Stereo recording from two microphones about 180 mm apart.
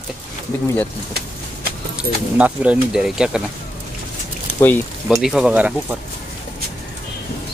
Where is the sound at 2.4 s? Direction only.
5° right (ahead or behind).